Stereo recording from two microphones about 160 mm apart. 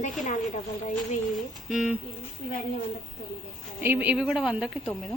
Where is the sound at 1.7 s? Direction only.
5° right (ahead or behind).